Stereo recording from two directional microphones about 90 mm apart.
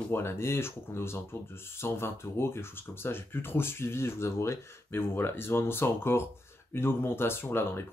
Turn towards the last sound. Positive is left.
turn(degrees=25)  # may be behind; listen again after turning